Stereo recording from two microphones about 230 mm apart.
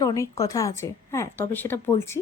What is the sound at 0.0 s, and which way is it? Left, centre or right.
Speech, centre.